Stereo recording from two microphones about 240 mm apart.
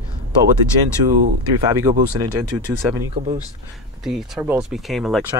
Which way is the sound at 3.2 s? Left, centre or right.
Right.